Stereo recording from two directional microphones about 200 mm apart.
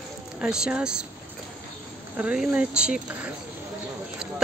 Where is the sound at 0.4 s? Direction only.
5° right (ahead or behind).